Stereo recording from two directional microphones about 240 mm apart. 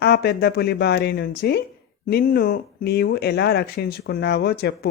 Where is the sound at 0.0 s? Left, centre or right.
Left.